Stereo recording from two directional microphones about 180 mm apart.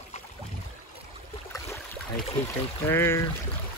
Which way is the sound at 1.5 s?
15° left (ahead or behind).